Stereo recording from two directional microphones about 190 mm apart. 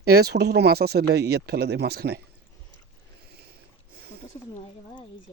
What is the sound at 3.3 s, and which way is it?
Boat, 55° right (ahead or behind).